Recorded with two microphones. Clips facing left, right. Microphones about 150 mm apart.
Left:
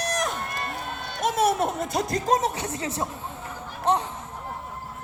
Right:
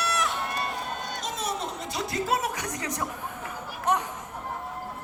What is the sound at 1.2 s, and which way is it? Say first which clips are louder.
Music: left 12 dB; 55° left (ahead or behind).